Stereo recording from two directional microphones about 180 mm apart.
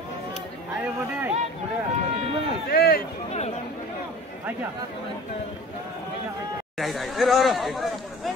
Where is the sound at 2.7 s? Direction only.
55° left (ahead or behind).